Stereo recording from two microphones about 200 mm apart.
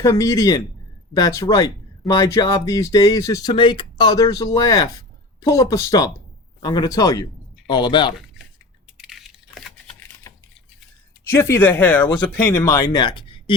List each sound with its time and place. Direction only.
0.0 s speech: 15° left (ahead or behind)
9.0 s computer keyboard: centre (ahead or behind)
11.3 s speech: 15° left (ahead or behind)